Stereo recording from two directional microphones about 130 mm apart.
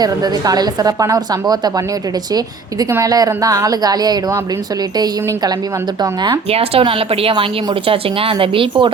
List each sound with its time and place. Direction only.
0.0 s a woman's voice: 30° right (ahead or behind)
2.9 s a woman's voice: 25° right (ahead or behind)
6.5 s a woman's voice: 50° right (ahead or behind)